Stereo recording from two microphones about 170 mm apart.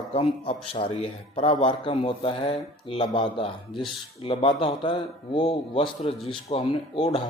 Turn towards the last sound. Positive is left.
turn(degrees=35)  # may be behind; listen again after turning